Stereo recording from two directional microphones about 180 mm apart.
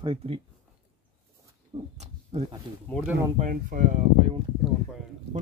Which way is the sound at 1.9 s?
40° right (ahead or behind).